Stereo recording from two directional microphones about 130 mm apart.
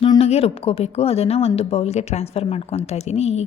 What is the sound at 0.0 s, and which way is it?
A woman's voice, 45° left (ahead or behind).